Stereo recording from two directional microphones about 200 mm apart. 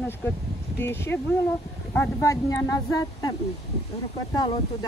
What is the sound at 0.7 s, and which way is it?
A woman's voice, 10° left (ahead or behind).